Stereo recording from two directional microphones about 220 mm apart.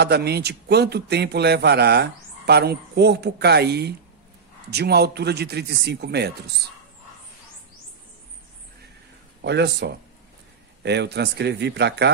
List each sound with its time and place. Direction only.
0.0 s a man's voice: 50° right (ahead or behind)
9.4 s a man's voice: 50° right (ahead or behind)